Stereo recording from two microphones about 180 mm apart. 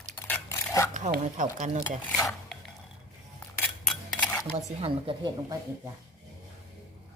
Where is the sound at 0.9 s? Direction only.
40° right (ahead or behind).